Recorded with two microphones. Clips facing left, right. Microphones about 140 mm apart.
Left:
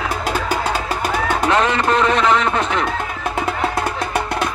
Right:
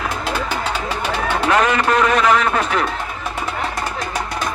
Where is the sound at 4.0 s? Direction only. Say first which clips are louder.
Left 3 dB; 60° left (ahead or behind).